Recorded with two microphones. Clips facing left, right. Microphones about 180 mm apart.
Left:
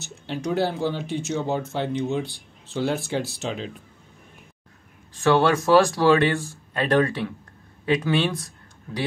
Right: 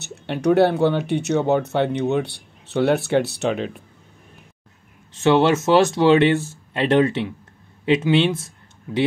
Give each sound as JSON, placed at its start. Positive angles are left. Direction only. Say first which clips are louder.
{"t": 0.0, "sound": "speech", "louder": "right 7 dB", "side_deg": -65}
{"t": 5.1, "sound": "speech", "louder": "right 3 dB", "side_deg": -25}
{"t": 8.4, "sound": "a sound", "louder": "left 1 dB", "side_deg": -25}